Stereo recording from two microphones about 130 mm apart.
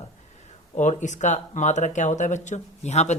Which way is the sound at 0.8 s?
65° left (ahead or behind).